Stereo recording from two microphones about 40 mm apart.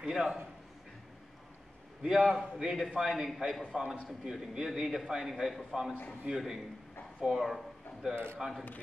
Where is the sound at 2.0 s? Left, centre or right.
Centre.